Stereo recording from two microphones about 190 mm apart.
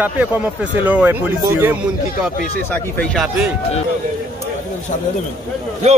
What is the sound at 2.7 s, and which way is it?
Speech, 5° left (ahead or behind).